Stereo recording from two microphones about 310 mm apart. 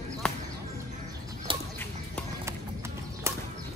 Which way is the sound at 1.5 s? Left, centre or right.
Centre.